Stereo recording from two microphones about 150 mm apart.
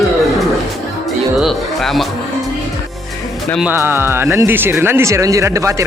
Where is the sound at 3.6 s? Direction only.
15° right (ahead or behind).